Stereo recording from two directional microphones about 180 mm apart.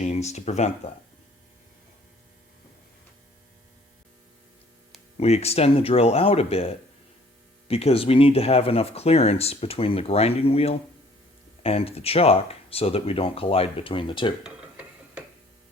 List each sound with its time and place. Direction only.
0.0 s speech: 40° left (ahead or behind)
5.1 s speech: 35° left (ahead or behind)
14.4 s a sound: 5° right (ahead or behind)